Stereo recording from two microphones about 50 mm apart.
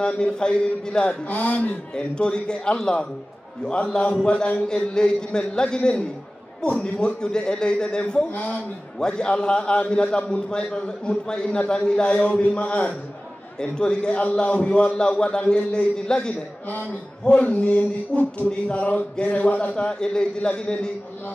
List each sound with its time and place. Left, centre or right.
0.0 s a man's voice: centre
1.2 s a man's voice: left
2.0 s a man's voice: centre
8.3 s a man's voice: left
9.0 s a man's voice: centre
16.6 s a man's voice: left
17.4 s a man's voice: left